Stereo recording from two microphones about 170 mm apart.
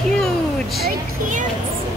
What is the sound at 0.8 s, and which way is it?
Speech, 50° right (ahead or behind).